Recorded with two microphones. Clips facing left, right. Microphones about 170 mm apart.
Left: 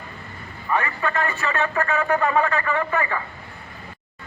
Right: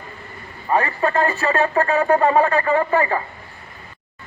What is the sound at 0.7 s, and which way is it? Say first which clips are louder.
Speech: right 5 dB; 35° right (ahead or behind).